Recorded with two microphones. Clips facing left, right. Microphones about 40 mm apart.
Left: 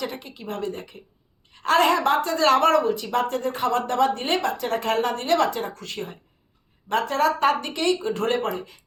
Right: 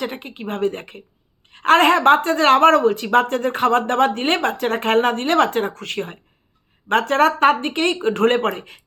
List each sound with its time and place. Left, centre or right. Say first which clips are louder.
0.0 s a woman's voice: right 4 dB; right